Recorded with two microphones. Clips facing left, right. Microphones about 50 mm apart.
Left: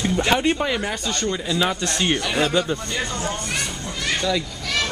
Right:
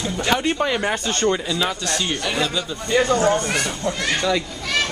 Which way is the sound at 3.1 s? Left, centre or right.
Right.